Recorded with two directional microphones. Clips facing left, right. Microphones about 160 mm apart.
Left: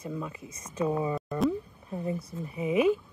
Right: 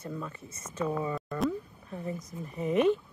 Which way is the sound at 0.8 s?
20° left (ahead or behind).